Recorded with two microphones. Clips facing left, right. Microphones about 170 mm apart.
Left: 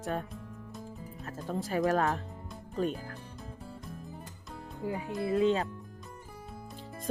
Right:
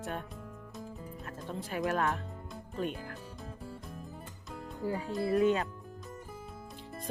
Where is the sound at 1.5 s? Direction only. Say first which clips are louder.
Left 5 dB; 40° left (ahead or behind).